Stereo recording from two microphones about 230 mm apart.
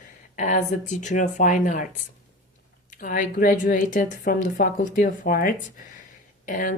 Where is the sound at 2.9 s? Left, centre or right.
Left.